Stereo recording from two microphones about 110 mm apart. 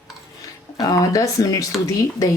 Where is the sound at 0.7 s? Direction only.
35° left (ahead or behind).